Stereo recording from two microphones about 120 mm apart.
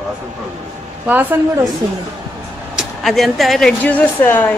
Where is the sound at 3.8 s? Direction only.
15° left (ahead or behind).